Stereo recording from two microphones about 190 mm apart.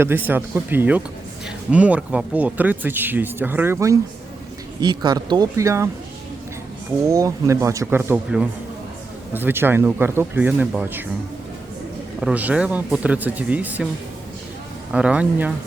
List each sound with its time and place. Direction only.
0.0 s a man's voice: 10° right (ahead or behind)
7.1 s speech: 15° right (ahead or behind)
12.2 s speech: 10° right (ahead or behind)
14.9 s speech: 5° right (ahead or behind)